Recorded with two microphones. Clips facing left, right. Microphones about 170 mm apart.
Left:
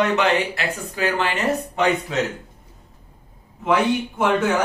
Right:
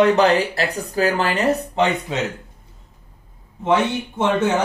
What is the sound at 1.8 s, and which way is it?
Speech, 25° right (ahead or behind).